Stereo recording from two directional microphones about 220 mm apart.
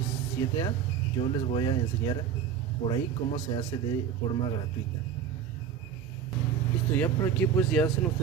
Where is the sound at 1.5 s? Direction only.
20° left (ahead or behind).